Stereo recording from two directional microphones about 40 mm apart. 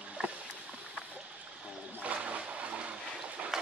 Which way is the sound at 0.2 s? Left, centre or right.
Right.